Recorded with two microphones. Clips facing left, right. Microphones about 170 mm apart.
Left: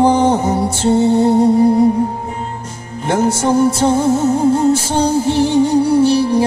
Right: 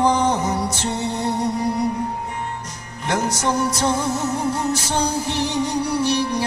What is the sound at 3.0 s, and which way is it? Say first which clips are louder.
Music: left 7 dB; 30° left (ahead or behind).